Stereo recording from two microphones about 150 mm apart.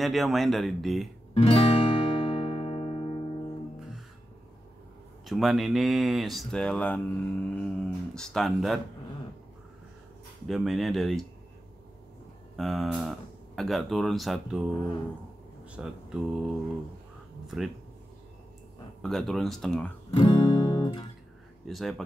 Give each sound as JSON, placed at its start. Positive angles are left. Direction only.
{"t": 0.0, "sound": "speech", "side_deg": 0}
{"t": 1.3, "sound": "music", "side_deg": 40}
{"t": 5.2, "sound": "speech", "side_deg": 0}
{"t": 10.5, "sound": "speech", "side_deg": 0}
{"t": 12.5, "sound": "speech", "side_deg": 0}
{"t": 15.6, "sound": "speech", "side_deg": -5}
{"t": 17.5, "sound": "speech", "side_deg": 0}
{"t": 19.0, "sound": "speech", "side_deg": 5}
{"t": 20.1, "sound": "music", "side_deg": 35}
{"t": 21.6, "sound": "speech", "side_deg": 0}